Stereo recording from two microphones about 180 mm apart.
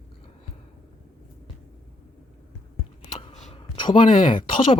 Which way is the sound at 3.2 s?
30° left (ahead or behind).